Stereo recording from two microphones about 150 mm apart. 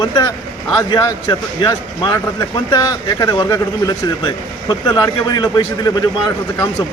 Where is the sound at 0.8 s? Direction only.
25° left (ahead or behind).